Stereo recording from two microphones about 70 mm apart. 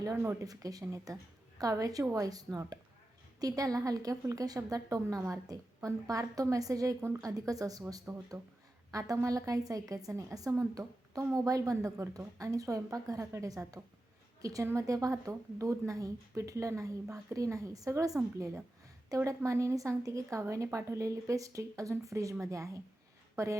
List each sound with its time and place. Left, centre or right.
0.4 s a woman's voice: right
8.3 s speech: right
8.9 s a woman's voice: right